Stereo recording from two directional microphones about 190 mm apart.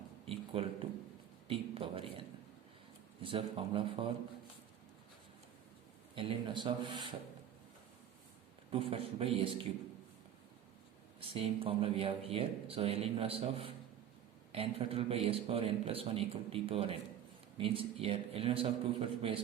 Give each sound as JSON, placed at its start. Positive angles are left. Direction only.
{"t": 0.3, "sound": "a sound", "side_deg": -30}
{"t": 3.2, "sound": "speech", "side_deg": -30}
{"t": 6.1, "sound": "speech", "side_deg": -25}
{"t": 8.7, "sound": "speech", "side_deg": -30}
{"t": 11.2, "sound": "speech", "side_deg": -30}